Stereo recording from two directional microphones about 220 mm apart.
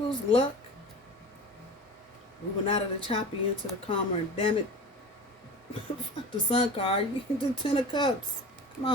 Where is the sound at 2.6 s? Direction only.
30° left (ahead or behind).